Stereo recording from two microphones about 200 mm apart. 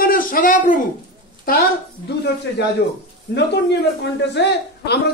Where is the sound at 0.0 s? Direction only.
45° left (ahead or behind).